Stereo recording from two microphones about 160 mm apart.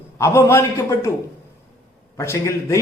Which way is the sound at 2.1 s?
15° left (ahead or behind).